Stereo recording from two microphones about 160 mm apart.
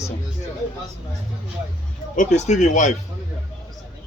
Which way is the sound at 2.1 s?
45° left (ahead or behind).